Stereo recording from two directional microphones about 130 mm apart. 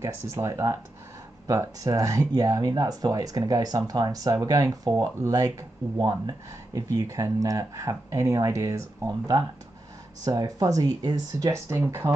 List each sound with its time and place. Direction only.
0.0 s speech: 20° right (ahead or behind)